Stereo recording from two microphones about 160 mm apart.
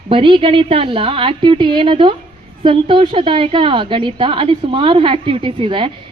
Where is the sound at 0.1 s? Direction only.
35° right (ahead or behind).